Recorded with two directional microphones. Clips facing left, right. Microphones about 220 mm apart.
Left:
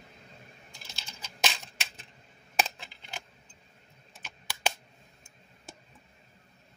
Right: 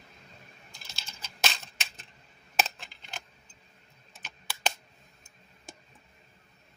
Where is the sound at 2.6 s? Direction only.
10° left (ahead or behind).